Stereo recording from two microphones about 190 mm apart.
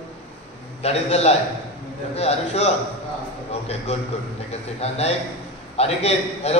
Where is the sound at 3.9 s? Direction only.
35° left (ahead or behind).